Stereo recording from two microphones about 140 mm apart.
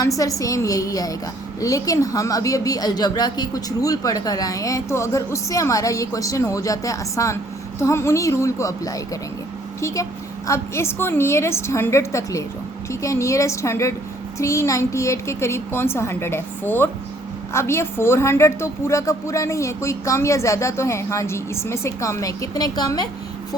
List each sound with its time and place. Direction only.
0.0 s a woman's voice: 25° left (ahead or behind)